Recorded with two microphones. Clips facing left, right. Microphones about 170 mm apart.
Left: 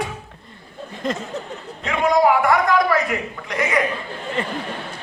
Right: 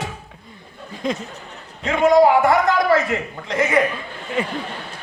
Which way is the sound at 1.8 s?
25° right (ahead or behind).